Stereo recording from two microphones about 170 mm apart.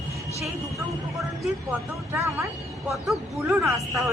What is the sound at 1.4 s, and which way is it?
Speech, 10° right (ahead or behind).